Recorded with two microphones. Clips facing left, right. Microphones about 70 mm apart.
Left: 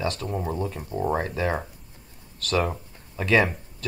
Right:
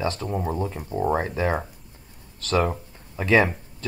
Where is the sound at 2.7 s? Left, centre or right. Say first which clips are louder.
Right 1 dB; centre.